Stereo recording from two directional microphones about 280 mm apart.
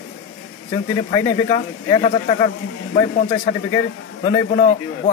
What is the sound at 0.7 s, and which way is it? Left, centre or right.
A man's voice, centre.